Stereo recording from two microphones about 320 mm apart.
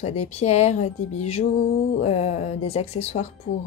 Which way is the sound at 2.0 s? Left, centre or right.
Centre.